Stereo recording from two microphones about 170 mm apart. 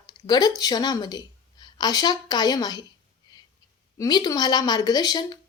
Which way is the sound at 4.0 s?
25° left (ahead or behind).